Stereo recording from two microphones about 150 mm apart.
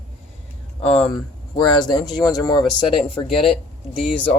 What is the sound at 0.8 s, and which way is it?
Speech, 40° left (ahead or behind).